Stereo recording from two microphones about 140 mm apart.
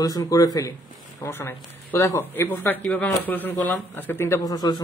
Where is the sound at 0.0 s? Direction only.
25° left (ahead or behind).